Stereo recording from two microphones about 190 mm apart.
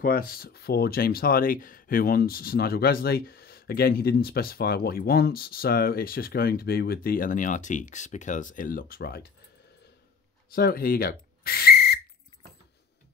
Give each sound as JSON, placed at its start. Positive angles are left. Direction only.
{"t": 0.0, "sound": "speech", "side_deg": 50}
{"t": 10.5, "sound": "speech", "side_deg": 50}